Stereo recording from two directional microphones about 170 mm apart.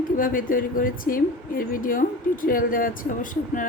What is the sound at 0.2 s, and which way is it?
A woman's voice, 55° left (ahead or behind).